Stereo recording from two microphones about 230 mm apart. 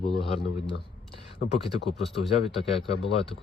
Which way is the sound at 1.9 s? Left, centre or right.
Left.